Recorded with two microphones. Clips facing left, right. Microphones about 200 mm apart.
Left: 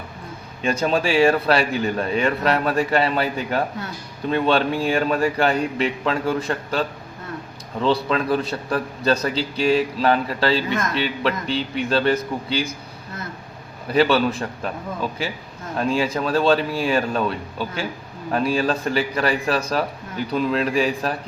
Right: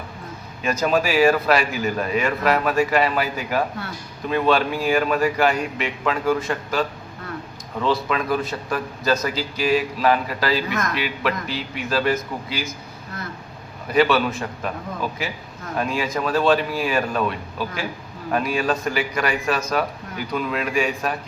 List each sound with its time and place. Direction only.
0.6 s a man's voice: 30° left (ahead or behind)
13.8 s a man's voice: 30° left (ahead or behind)